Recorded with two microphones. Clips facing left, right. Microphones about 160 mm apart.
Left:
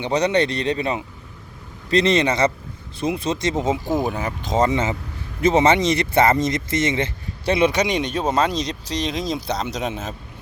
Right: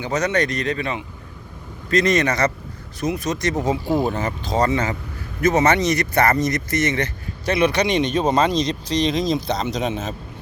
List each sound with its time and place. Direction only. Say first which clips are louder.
0.0 s speech: left 2 dB; 30° left (ahead or behind)
4.1 s speech: right 2 dB; centre (ahead or behind)
4.4 s speech: left 1 dB; 20° left (ahead or behind)